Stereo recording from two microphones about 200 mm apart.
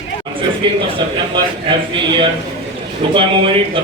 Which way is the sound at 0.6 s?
25° right (ahead or behind).